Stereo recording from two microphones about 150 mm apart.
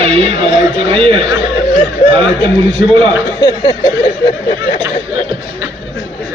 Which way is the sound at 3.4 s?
30° left (ahead or behind).